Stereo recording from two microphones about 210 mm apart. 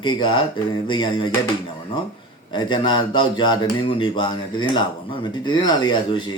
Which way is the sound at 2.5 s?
20° left (ahead or behind).